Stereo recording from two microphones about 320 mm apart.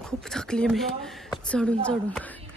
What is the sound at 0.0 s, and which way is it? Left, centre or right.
A woman's voice, centre.